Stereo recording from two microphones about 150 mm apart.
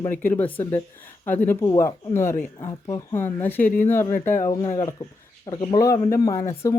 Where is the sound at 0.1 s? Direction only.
10° left (ahead or behind).